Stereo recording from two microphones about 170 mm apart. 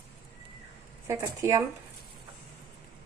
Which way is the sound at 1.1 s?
20° right (ahead or behind).